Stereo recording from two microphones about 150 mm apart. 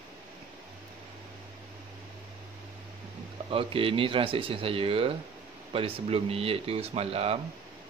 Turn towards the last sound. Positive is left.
turn(degrees=-40)  # may be behind; listen again after turning